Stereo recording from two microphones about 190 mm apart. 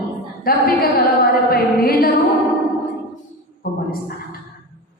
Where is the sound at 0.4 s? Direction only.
50° left (ahead or behind).